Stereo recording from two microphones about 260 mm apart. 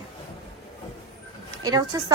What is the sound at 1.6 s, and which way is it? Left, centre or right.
Speech, centre.